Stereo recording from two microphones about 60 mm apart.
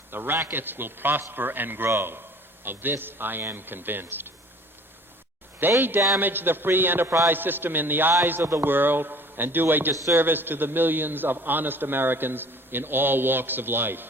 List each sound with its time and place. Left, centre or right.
0.1 s a man's voice: right
5.6 s a man's voice: right